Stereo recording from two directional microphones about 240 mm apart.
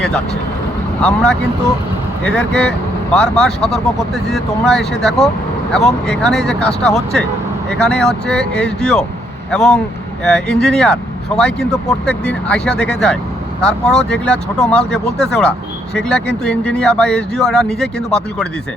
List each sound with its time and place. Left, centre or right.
1.0 s speech: centre